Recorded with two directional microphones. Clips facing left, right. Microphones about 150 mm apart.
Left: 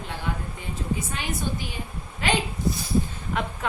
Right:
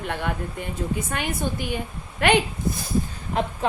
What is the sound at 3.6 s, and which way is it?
Speech, 30° right (ahead or behind).